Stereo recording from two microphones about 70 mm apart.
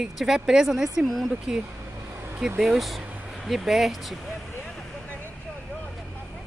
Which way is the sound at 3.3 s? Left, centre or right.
Centre.